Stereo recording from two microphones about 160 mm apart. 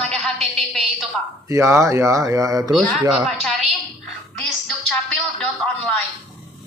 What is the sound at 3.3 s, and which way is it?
Speech, 5° left (ahead or behind).